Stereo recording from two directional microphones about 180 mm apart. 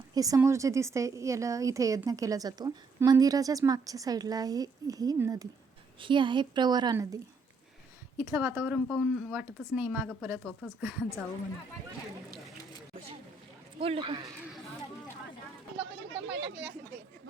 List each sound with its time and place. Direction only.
0.1 s a woman's voice: 20° right (ahead or behind)
8.2 s speech: 10° right (ahead or behind)
13.7 s speech: 30° right (ahead or behind)
16.3 s speech: 85° right